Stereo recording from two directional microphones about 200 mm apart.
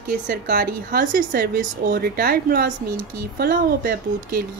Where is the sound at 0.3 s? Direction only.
50° right (ahead or behind).